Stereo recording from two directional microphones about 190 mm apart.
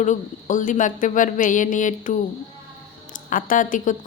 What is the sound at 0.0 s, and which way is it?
Speech, 40° left (ahead or behind).